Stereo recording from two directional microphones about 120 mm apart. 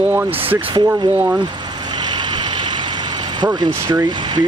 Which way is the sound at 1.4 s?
40° right (ahead or behind).